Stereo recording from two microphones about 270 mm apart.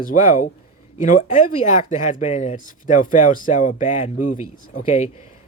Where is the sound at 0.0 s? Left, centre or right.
Left.